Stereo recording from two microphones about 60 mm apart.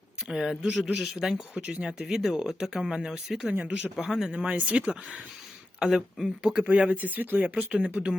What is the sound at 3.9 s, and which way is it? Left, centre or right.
Speech, centre.